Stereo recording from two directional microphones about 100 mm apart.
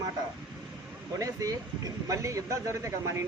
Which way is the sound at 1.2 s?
35° right (ahead or behind).